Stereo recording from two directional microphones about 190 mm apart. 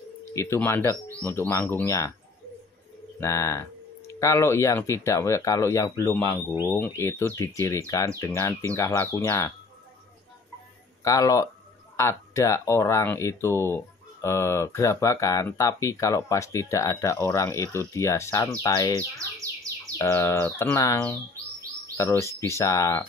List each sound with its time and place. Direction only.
0.3 s speech: 15° left (ahead or behind)
3.2 s speech: 15° left (ahead or behind)
11.1 s speech: 15° left (ahead or behind)